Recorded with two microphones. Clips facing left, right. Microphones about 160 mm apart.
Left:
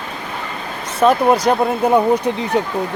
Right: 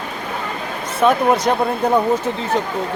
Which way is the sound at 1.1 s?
Centre (ahead or behind).